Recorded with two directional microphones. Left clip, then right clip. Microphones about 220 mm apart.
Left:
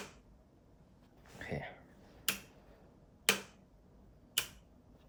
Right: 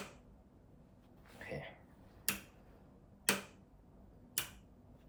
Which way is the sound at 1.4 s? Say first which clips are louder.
Left 3 dB; 45° left (ahead or behind).